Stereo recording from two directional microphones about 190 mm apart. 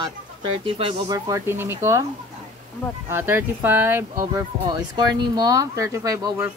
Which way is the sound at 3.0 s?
10° right (ahead or behind).